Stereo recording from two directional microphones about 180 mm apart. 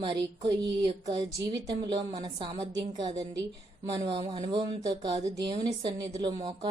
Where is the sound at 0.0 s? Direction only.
25° right (ahead or behind).